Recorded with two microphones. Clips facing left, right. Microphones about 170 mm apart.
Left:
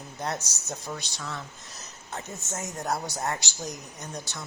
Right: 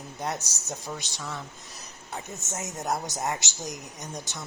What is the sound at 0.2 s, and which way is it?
Speech, 15° right (ahead or behind).